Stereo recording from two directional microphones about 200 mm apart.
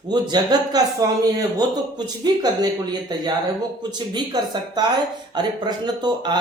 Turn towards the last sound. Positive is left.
turn(degrees=-20)  # may be behind; listen again after turning